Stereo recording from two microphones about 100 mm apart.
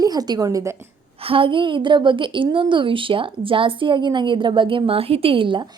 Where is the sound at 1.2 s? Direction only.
65° right (ahead or behind).